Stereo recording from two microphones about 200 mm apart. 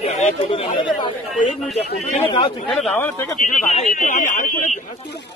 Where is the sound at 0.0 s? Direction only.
35° left (ahead or behind).